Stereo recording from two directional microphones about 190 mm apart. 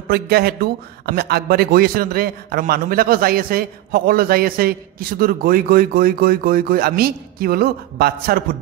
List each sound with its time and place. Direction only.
0.1 s a man's voice: 55° right (ahead or behind)